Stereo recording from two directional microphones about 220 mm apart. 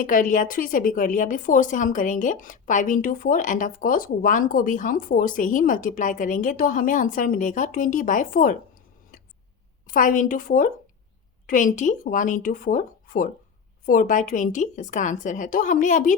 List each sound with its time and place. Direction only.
0.0 s a woman's voice: 35° left (ahead or behind)
9.8 s a woman's voice: 35° left (ahead or behind)